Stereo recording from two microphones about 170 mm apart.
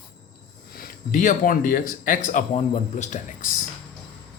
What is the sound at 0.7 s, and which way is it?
Speech, 55° left (ahead or behind).